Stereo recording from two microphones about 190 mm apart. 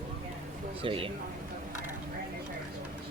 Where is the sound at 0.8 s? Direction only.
30° right (ahead or behind).